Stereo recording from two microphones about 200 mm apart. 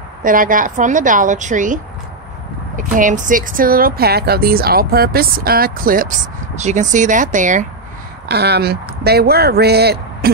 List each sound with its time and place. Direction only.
0.2 s a woman's voice: 45° right (ahead or behind)
8.3 s speech: 55° right (ahead or behind)